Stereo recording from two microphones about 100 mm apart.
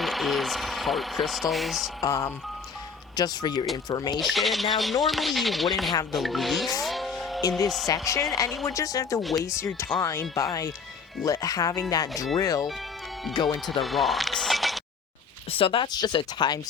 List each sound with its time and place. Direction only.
0.0 s speech: centre (ahead or behind)
2.0 s speech: 35° left (ahead or behind)
4.2 s speech: centre (ahead or behind)
6.8 s music: centre (ahead or behind)
7.9 s speech: 35° left (ahead or behind)
13.8 s speech: centre (ahead or behind)
15.5 s speech: 65° left (ahead or behind)
15.9 s speech: 45° left (ahead or behind)